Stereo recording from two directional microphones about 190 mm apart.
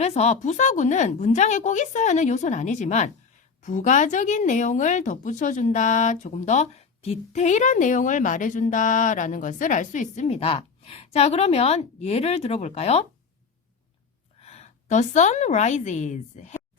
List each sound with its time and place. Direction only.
0.0 s speech: 35° left (ahead or behind)
14.4 s a woman's voice: 35° left (ahead or behind)